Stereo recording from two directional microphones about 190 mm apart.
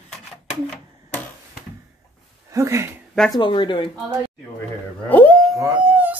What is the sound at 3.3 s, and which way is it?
Speech, 25° left (ahead or behind).